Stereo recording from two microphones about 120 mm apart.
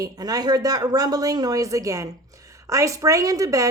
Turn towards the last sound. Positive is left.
turn(degrees=-30)  # may be behind; listen again after turning